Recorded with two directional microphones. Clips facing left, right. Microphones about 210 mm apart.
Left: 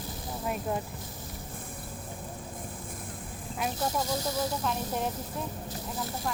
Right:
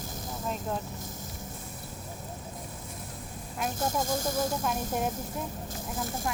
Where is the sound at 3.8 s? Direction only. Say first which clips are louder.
Right 2 dB; 50° right (ahead or behind).